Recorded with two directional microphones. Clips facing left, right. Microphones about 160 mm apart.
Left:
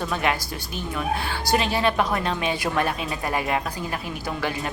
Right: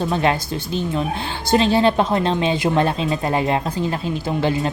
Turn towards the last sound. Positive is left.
turn(degrees=-25)  # may be behind; listen again after turning